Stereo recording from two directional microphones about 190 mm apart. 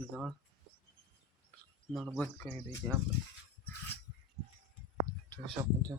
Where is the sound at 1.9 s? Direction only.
Centre (ahead or behind).